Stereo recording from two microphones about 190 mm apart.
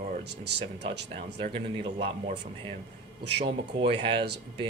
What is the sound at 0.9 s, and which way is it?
Speech, 30° right (ahead or behind).